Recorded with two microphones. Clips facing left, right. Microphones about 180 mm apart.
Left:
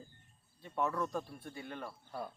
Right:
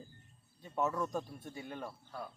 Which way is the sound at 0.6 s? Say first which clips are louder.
Right 1 dB; 20° right (ahead or behind).